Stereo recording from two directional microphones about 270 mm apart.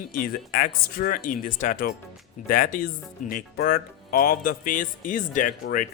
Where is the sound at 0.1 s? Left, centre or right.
Left.